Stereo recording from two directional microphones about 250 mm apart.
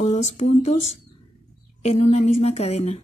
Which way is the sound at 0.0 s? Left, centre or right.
Left.